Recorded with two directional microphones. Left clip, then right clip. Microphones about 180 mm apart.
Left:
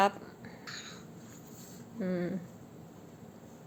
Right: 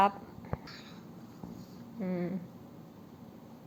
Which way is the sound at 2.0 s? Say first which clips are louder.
Left 2 dB; 25° left (ahead or behind).